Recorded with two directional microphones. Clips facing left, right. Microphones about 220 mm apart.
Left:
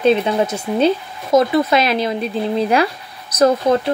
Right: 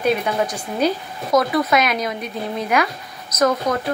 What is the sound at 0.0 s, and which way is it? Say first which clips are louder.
Speech: left 5 dB; 25° left (ahead or behind).